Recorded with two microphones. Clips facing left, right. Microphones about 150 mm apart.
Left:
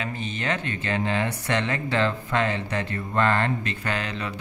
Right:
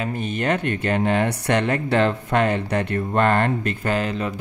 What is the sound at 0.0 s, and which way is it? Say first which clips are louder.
Speech: right 6 dB; 55° right (ahead or behind).